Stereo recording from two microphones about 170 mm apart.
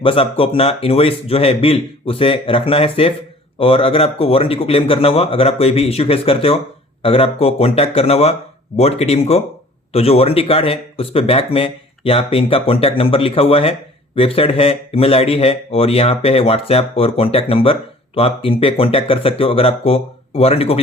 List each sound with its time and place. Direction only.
0.0 s speech: 30° left (ahead or behind)